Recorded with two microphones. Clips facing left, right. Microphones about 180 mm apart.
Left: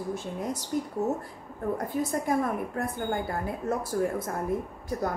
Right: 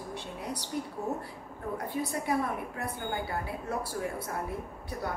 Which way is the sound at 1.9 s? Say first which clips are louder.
Left 2 dB; 45° left (ahead or behind).